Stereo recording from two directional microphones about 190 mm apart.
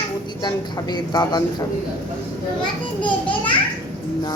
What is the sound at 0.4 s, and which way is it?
Speech, 20° left (ahead or behind).